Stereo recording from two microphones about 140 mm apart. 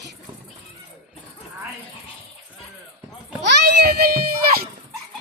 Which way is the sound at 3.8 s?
90° right.